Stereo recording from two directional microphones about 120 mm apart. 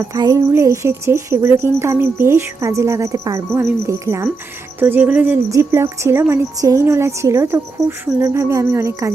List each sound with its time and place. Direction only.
0.1 s speech: 30° right (ahead or behind)